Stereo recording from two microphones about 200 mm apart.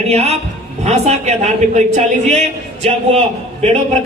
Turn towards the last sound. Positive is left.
turn(degrees=-30)  # may be behind; listen again after turning